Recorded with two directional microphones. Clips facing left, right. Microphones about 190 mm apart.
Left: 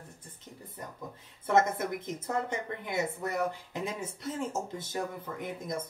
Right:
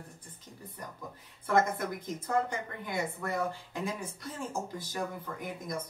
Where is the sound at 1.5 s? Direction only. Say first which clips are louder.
Left 2 dB; 20° left (ahead or behind).